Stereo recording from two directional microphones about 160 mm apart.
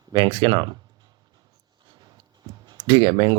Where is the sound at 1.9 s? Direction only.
25° right (ahead or behind).